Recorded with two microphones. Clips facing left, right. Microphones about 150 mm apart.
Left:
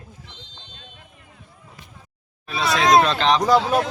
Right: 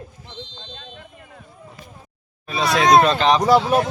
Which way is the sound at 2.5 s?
Centre (ahead or behind).